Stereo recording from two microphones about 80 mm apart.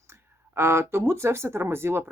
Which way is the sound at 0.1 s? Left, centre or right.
Right.